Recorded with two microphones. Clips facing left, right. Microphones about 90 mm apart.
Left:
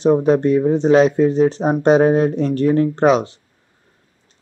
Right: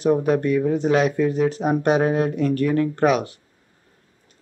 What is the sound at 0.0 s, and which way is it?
Speech, 25° left (ahead or behind).